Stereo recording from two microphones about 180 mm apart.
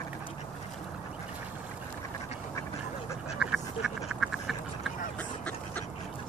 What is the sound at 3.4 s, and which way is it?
Duck, centre (ahead or behind).